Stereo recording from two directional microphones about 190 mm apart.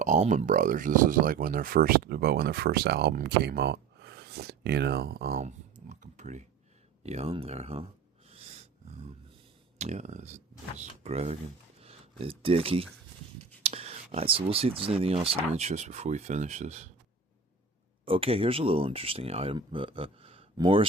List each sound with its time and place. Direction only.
0.0 s speech: 40° right (ahead or behind)
5.9 s a sound: 40° right (ahead or behind)
7.0 s speech: 35° right (ahead or behind)
9.7 s speech: 35° right (ahead or behind)
11.8 s a sound: 30° right (ahead or behind)
13.6 s speech: 30° right (ahead or behind)
18.0 s speech: 30° right (ahead or behind)